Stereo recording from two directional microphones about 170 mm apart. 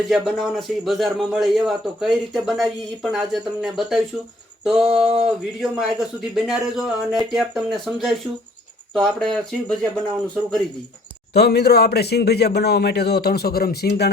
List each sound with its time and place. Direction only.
0.1 s a man's voice: centre (ahead or behind)
11.3 s a man's voice: 75° left (ahead or behind)